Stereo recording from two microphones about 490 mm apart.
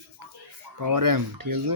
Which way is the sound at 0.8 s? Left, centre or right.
Right.